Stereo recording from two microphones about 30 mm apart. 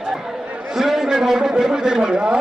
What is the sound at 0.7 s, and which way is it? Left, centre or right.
A man's voice, centre.